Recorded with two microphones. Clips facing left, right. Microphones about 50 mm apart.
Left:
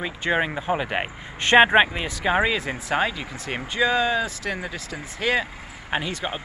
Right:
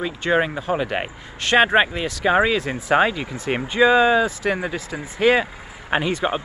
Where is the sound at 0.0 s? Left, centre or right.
Centre.